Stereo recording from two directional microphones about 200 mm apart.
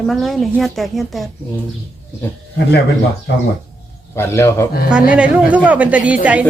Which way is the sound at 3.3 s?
60° left (ahead or behind).